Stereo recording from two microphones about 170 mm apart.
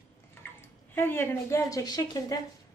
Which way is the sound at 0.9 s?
15° left (ahead or behind).